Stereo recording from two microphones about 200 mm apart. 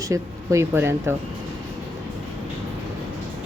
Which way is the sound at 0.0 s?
15° right (ahead or behind).